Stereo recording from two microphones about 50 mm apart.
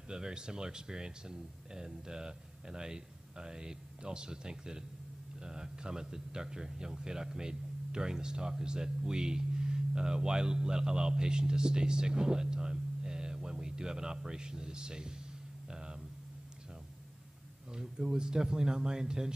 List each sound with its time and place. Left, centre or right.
0.1 s speech: centre
15.7 s a sound: centre
17.7 s speech: centre